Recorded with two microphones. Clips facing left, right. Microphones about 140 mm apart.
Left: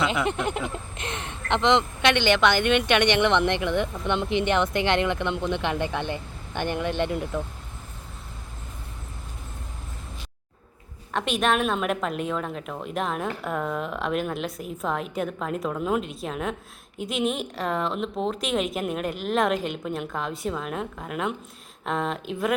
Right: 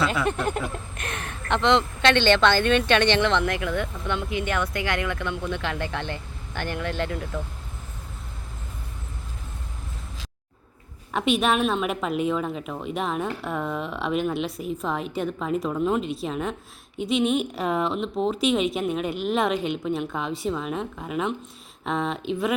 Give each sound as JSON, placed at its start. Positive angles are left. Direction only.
{"t": 0.0, "sound": "speech", "side_deg": 20}
{"t": 11.1, "sound": "a woman's voice", "side_deg": 0}